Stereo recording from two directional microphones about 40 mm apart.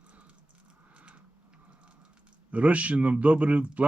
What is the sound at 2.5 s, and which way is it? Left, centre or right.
A man's voice, right.